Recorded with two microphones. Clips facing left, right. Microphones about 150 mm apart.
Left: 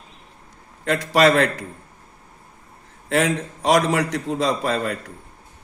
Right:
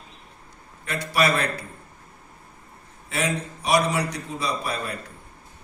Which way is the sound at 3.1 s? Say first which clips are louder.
Left 6 dB; 90° left.